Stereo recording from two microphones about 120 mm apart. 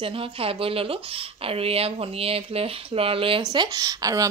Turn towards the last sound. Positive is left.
turn(degrees=-30)  # may be behind; listen again after turning